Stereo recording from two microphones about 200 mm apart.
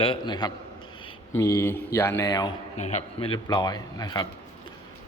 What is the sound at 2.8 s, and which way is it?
Speech, 35° left (ahead or behind).